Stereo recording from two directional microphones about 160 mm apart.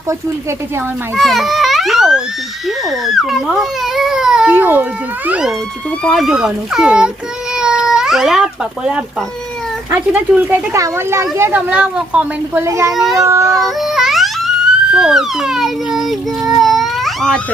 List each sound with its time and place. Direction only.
1.1 s children playing: centre (ahead or behind)
2.6 s a child's voice: centre (ahead or behind)
7.5 s cat: 5° right (ahead or behind)
9.9 s speech: 10° right (ahead or behind)
12.6 s speech: 20° right (ahead or behind)
12.9 s a child's voice: centre (ahead or behind)
13.1 s speech: 15° right (ahead or behind)
13.5 s baby cry: centre (ahead or behind)
14.9 s speech: 5° right (ahead or behind)